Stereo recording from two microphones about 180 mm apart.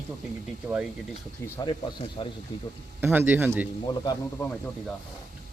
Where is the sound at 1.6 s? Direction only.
25° left (ahead or behind).